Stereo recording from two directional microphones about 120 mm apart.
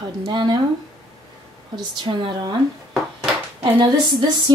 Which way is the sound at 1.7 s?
40° right (ahead or behind).